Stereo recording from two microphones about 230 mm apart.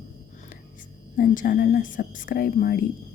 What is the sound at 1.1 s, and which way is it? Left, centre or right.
A woman's voice, left.